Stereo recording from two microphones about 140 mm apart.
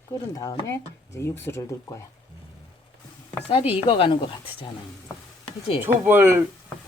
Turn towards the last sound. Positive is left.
turn(degrees=-15)  # may be behind; listen again after turning